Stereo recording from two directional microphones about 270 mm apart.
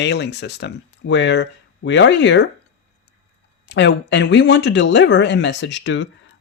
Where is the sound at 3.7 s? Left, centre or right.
Left.